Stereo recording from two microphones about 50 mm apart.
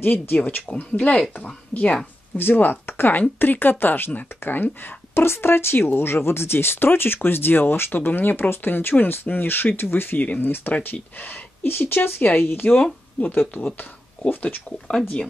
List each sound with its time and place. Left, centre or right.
0.0 s speech: left
0.7 s a woman's voice: left
2.3 s a woman's voice: left
14.9 s speech: left